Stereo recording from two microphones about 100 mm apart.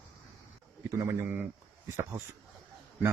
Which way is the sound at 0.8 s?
30° right (ahead or behind).